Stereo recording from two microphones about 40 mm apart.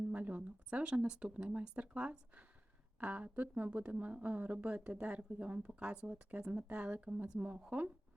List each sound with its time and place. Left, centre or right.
0.1 s speech: right
6.3 s speech: right
6.7 s speech: right